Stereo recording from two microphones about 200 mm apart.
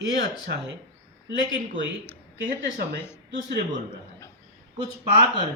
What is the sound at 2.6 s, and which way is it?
Speech, 10° left (ahead or behind).